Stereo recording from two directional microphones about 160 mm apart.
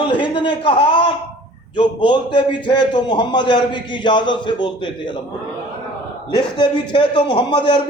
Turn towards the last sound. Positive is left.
turn(degrees=30)  # may be behind; listen again after turning